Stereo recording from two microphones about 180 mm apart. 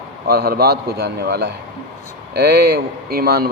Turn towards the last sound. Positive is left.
turn(degrees=-60)  # may be behind; listen again after turning